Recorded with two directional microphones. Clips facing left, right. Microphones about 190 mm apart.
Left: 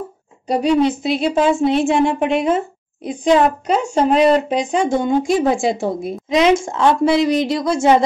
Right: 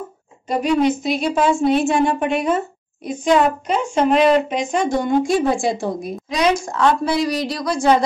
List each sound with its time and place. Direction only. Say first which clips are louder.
0.5 s a woman's voice: left 2 dB; 30° left (ahead or behind)
5.2 s a woman's voice: left 2 dB; 20° left (ahead or behind)